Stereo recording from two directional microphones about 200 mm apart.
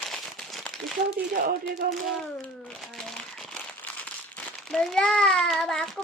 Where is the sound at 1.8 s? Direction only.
45° right (ahead or behind).